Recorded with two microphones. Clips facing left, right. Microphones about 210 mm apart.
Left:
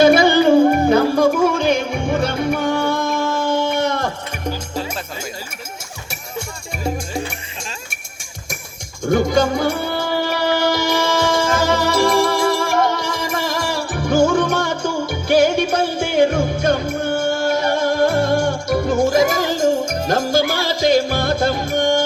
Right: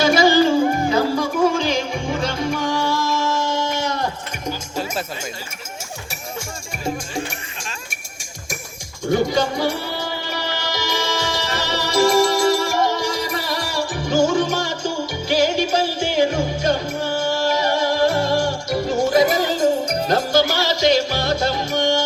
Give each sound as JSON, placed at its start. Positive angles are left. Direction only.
{"t": 0.0, "sound": "music", "side_deg": 60}
{"t": 9.0, "sound": "music", "side_deg": 50}